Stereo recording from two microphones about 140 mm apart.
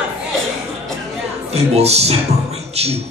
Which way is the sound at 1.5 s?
50° right (ahead or behind).